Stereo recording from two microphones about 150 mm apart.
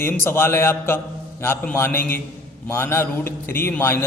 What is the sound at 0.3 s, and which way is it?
A man's voice, 15° left (ahead or behind).